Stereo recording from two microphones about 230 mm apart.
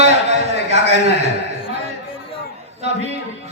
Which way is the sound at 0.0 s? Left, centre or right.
Right.